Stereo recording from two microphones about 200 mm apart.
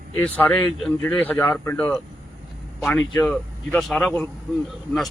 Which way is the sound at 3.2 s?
5° left (ahead or behind).